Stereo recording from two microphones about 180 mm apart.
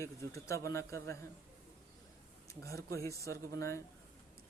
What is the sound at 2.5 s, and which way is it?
Speech, 15° left (ahead or behind).